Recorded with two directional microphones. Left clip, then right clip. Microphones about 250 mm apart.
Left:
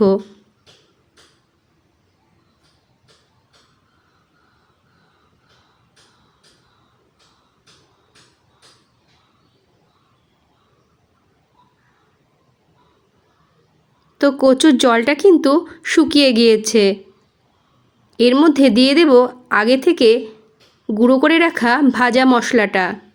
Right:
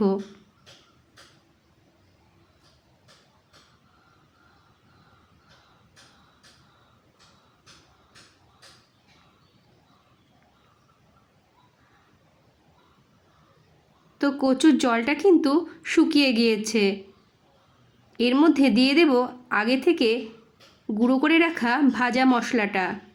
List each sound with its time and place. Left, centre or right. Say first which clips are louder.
14.2 s speech: left 10 dB; centre
18.2 s speech: left 8 dB; centre